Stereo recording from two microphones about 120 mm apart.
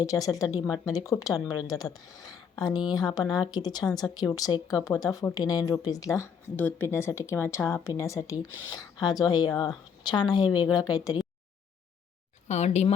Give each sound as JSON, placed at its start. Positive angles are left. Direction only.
{"t": 0.0, "sound": "speech", "side_deg": 30}
{"t": 12.5, "sound": "speech", "side_deg": 65}